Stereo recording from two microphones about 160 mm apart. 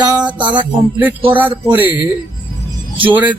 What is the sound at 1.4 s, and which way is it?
Music, 10° right (ahead or behind).